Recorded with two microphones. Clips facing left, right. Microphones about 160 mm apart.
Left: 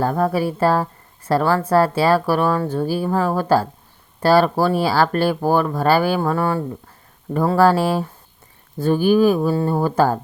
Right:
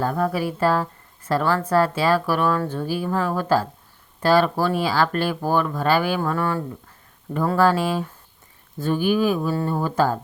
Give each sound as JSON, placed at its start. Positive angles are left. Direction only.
{"t": 0.0, "sound": "a woman's voice", "side_deg": 40}